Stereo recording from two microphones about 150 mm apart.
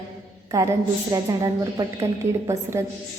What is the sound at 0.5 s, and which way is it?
Speech, 20° right (ahead or behind).